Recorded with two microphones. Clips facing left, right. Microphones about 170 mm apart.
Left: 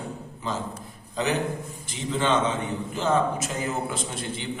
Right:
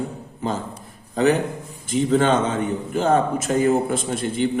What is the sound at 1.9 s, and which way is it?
A man's voice, 50° right (ahead or behind).